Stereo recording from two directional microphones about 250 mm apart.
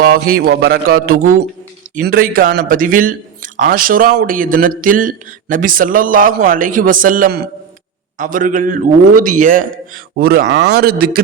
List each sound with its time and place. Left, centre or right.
0.1 s a man's voice: right